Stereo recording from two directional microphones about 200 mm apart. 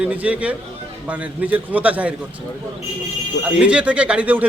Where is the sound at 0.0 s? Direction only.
5° right (ahead or behind).